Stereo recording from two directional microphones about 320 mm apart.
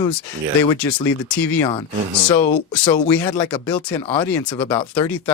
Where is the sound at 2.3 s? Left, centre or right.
Left.